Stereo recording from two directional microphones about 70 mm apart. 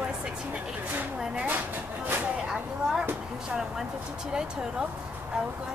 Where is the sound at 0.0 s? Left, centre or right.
Right.